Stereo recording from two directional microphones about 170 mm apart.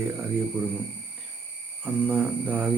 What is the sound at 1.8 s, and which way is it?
Speech, 10° right (ahead or behind).